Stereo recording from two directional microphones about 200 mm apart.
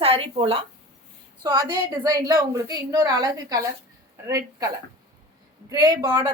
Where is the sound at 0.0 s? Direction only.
30° right (ahead or behind).